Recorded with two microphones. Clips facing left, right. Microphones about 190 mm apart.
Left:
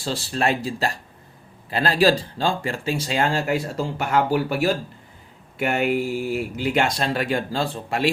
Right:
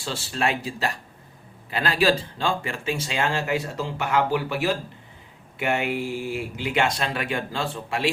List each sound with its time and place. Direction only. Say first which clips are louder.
0.0 s speech: left 3 dB; 35° left (ahead or behind)